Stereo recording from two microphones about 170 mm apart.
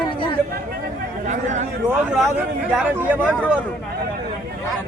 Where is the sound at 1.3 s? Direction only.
45° right (ahead or behind).